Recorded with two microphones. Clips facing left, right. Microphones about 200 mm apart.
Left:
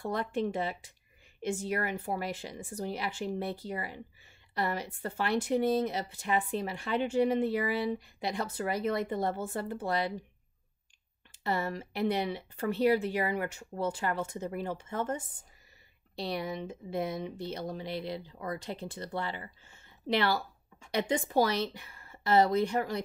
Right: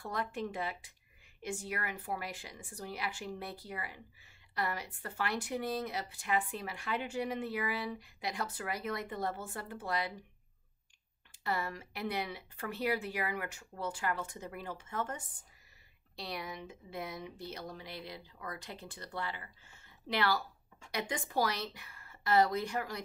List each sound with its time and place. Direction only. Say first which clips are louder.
0.0 s speech: left 6 dB; 25° left (ahead or behind)
11.4 s speech: left 5 dB; 25° left (ahead or behind)